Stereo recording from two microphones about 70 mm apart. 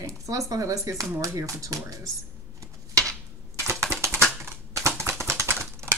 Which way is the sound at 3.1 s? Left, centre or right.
Right.